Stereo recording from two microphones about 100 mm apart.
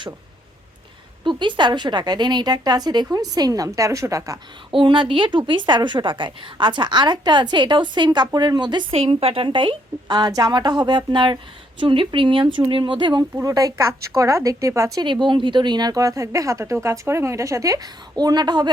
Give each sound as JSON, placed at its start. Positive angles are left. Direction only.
{"t": 1.2, "sound": "a woman's voice", "side_deg": -55}
{"t": 4.7, "sound": "a woman's voice", "side_deg": -55}
{"t": 8.9, "sound": "a woman's voice", "side_deg": -75}
{"t": 13.3, "sound": "a woman's voice", "side_deg": -35}
{"t": 15.0, "sound": "a woman's voice", "side_deg": -55}